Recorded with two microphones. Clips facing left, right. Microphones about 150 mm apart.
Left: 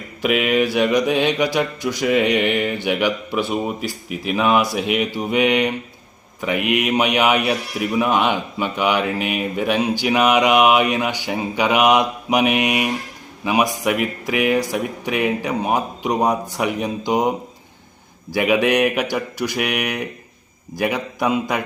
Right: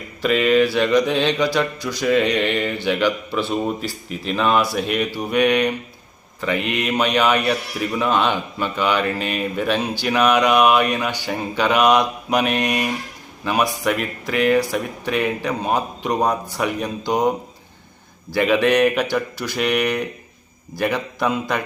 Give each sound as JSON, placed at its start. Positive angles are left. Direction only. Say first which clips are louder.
{"t": 0.2, "sound": "a man's voice", "louder": "right 2 dB", "side_deg": 15}